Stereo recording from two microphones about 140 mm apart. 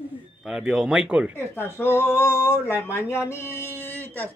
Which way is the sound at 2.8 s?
15° left (ahead or behind).